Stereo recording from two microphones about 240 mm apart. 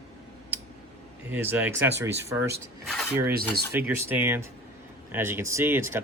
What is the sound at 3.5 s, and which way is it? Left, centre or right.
Speech, right.